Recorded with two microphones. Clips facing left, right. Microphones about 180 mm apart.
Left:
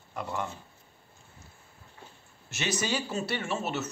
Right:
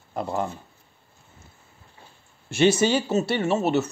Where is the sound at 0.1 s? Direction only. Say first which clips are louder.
Right 7 dB; 35° right (ahead or behind).